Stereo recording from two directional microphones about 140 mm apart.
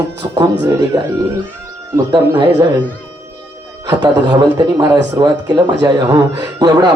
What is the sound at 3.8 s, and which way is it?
A man's voice, 30° right (ahead or behind).